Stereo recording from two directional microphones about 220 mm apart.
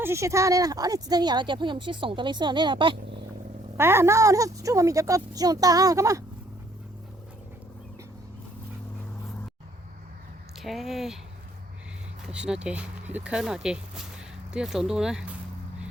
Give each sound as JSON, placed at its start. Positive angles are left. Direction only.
{"t": 0.0, "sound": "speech", "side_deg": -15}
{"t": 3.8, "sound": "speech", "side_deg": -10}
{"t": 10.6, "sound": "speech", "side_deg": 0}
{"t": 12.3, "sound": "speech", "side_deg": -5}